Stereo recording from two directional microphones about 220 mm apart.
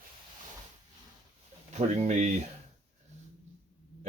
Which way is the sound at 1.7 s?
30° right (ahead or behind).